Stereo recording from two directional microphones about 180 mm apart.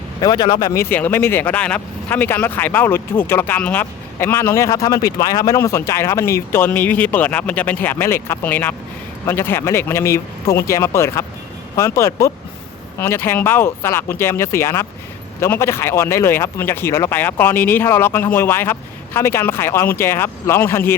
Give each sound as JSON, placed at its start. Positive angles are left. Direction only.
{"t": 0.2, "sound": "speech", "side_deg": 25}